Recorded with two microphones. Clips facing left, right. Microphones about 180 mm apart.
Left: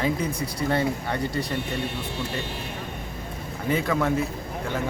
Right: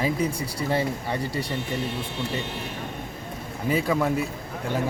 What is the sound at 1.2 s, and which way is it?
Speech, 30° right (ahead or behind).